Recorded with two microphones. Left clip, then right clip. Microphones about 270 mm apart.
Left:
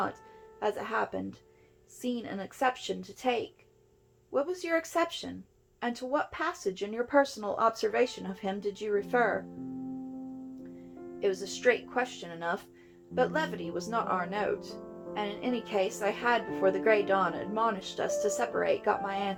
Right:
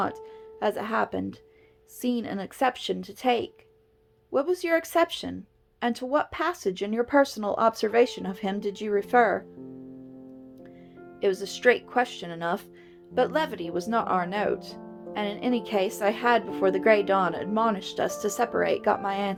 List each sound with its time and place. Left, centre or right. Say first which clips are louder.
0.6 s speech: right 5 dB; right
11.2 s speech: right 5 dB; right